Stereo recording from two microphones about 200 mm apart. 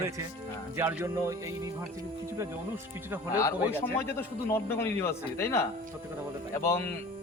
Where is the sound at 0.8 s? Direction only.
10° right (ahead or behind).